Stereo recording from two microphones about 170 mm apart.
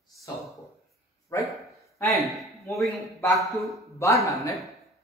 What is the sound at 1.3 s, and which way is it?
Speech, 15° left (ahead or behind).